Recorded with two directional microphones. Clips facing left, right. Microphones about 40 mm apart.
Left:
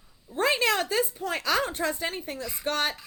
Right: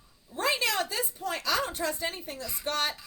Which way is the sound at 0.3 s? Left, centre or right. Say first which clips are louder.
Left 4 dB; left.